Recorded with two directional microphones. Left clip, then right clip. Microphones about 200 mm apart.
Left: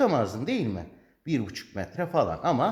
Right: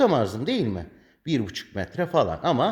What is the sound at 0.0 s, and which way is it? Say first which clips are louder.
A man's voice: right 3 dB; 45° right (ahead or behind).